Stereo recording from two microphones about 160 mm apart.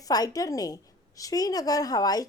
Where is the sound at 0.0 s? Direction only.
25° left (ahead or behind).